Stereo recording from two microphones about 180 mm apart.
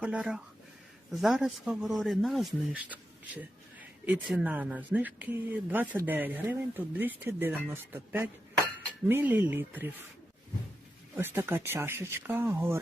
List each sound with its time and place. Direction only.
0.0 s speech: 5° right (ahead or behind)
11.2 s speech: 10° right (ahead or behind)